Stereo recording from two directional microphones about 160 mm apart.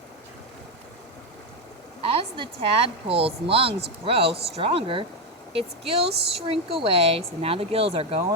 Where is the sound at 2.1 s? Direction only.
35° right (ahead or behind).